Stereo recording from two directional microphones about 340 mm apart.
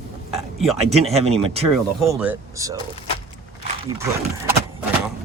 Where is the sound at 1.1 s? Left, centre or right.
Centre.